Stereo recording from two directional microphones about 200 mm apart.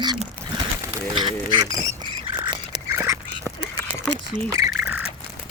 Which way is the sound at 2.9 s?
15° right (ahead or behind).